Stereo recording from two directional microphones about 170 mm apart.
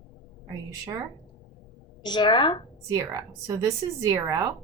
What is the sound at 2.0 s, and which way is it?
Speech, 25° left (ahead or behind).